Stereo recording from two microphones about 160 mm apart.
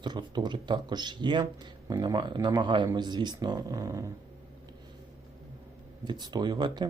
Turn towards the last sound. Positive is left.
turn(degrees=-25)  # may be behind; listen again after turning